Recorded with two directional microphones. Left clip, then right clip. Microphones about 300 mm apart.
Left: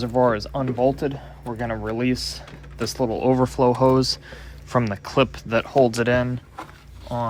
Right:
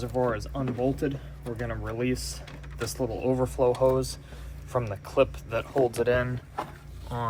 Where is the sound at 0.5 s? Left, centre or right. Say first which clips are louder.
Left 8 dB; left.